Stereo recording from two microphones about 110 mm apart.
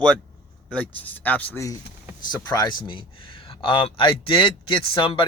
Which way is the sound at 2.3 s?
40° left (ahead or behind).